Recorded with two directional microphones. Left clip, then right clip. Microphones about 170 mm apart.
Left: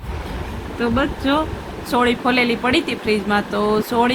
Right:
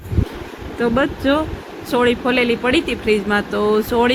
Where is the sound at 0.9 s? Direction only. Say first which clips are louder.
Right 1 dB; 20° right (ahead or behind).